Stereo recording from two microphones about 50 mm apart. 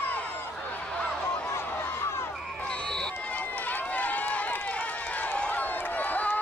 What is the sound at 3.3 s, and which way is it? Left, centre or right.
Run, left.